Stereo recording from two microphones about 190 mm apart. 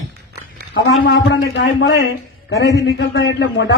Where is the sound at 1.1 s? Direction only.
75° left (ahead or behind).